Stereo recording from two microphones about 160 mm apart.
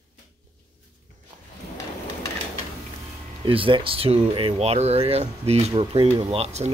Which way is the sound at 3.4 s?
35° right (ahead or behind).